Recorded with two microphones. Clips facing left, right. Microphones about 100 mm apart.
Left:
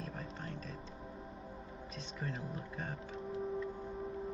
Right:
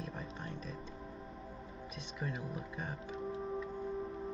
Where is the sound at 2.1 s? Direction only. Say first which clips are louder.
Right 1 dB; 30° left (ahead or behind).